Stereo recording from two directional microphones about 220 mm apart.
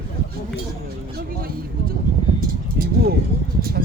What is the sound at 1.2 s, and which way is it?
Vehicle, 40° right (ahead or behind).